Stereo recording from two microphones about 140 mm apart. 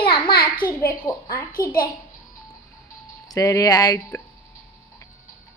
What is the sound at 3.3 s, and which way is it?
Child singing, 25° left (ahead or behind).